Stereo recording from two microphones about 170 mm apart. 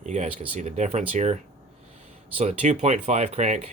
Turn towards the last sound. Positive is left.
turn(degrees=-40)  # may be behind; listen again after turning